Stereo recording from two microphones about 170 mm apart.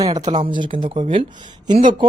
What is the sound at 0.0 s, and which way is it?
A woman's voice, 25° right (ahead or behind).